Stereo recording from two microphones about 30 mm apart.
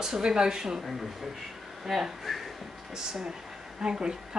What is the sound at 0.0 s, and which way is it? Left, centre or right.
Speech, centre.